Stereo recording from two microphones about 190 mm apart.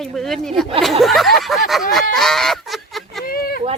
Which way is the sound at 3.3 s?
50° left (ahead or behind).